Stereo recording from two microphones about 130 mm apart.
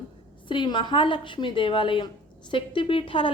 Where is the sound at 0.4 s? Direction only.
40° left (ahead or behind).